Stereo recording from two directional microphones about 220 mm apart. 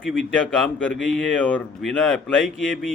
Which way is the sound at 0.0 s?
Centre (ahead or behind).